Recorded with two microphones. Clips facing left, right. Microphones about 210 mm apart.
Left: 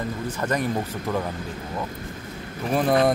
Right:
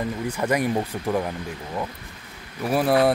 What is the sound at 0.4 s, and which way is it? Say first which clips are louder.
Speech: right 3 dB; 10° right (ahead or behind).